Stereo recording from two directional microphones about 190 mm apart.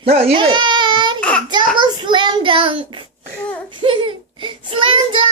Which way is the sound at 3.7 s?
25° right (ahead or behind).